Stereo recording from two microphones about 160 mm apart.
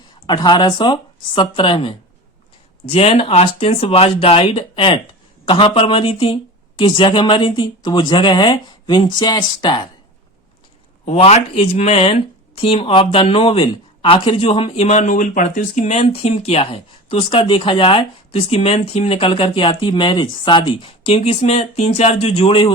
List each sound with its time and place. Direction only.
0.3 s speech: 30° left (ahead or behind)
11.0 s speech: 40° left (ahead or behind)